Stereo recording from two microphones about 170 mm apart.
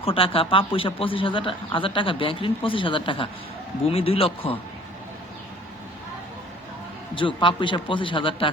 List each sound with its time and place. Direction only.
0.0 s speech: 30° left (ahead or behind)
7.2 s a man's voice: 30° left (ahead or behind)